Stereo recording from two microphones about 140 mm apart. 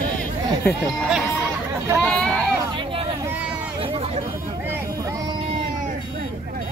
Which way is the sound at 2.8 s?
40° right (ahead or behind).